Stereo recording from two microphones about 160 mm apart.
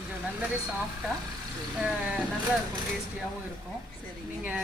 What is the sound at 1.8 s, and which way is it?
Speech, 5° right (ahead or behind).